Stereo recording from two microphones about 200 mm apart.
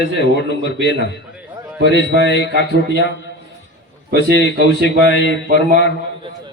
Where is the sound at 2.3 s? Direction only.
60° left (ahead or behind).